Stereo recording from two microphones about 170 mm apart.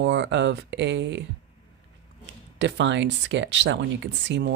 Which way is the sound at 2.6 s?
90° right.